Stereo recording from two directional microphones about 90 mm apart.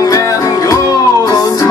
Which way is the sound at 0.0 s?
40° left (ahead or behind).